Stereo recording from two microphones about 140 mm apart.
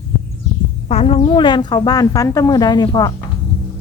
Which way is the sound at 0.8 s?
45° left (ahead or behind).